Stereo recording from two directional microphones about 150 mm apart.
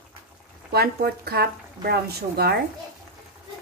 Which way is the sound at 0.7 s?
90° right.